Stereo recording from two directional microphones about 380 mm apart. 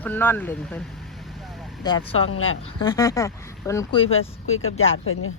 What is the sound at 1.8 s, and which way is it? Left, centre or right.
Speech, centre.